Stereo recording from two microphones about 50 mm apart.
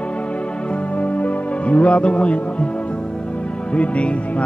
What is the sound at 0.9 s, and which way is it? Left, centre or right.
Music, left.